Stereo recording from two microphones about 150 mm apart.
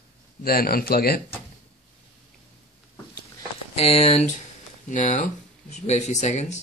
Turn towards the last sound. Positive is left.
turn(degrees=50)  # may be behind; listen again after turning